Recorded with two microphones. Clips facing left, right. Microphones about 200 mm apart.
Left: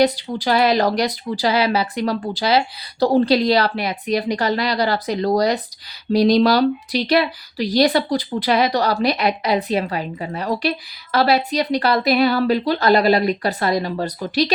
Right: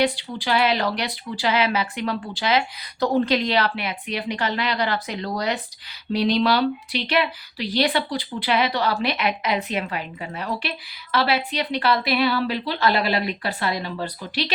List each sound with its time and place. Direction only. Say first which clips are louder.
0.0 s speech: left 5 dB; 40° left (ahead or behind)